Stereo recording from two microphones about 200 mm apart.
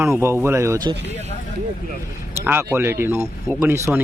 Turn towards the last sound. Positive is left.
turn(degrees=-10)  # may be behind; listen again after turning